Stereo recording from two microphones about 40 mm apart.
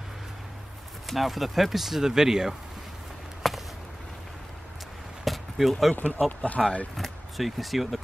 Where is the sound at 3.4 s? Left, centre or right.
Centre.